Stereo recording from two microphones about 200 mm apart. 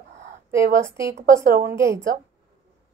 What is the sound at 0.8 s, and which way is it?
Speech, 15° right (ahead or behind).